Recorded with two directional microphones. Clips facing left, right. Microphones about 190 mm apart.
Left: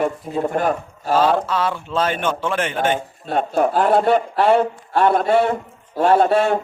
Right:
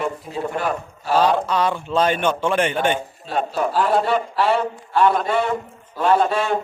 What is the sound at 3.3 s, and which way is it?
A man's voice, 55° left (ahead or behind).